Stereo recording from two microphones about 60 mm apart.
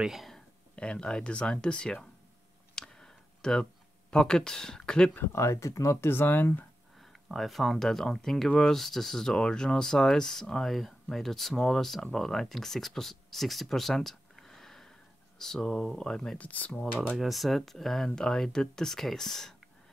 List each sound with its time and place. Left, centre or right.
0.0 s speech: centre
0.7 s speech: centre
2.7 s a sound: centre
4.1 s speech: centre
5.2 s speech: left
6.0 s speech: left
7.0 s speech: centre
16.3 s speech: left
17.2 s speech: centre